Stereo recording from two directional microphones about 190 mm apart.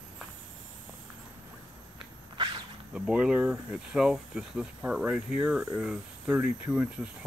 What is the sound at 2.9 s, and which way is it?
Speech, 5° right (ahead or behind).